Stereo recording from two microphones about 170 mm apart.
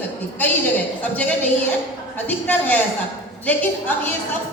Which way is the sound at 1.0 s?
10° left (ahead or behind).